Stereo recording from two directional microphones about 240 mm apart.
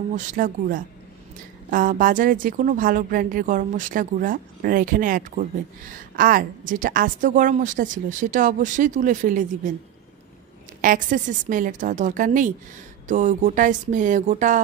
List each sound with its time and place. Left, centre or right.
0.1 s a woman's voice: right
10.8 s a woman's voice: right